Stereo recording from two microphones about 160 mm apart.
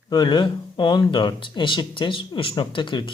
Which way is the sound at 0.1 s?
30° left (ahead or behind).